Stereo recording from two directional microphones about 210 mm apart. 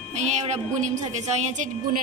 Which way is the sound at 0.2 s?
35° right (ahead or behind).